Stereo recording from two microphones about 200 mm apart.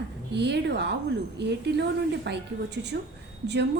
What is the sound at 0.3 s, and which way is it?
A woman's voice, 60° right (ahead or behind).